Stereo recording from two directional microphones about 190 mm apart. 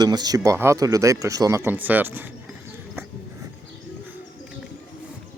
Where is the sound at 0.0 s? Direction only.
20° right (ahead or behind).